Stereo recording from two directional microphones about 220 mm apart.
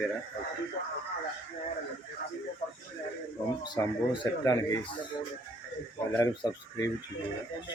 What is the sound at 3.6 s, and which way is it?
Speech, 20° left (ahead or behind).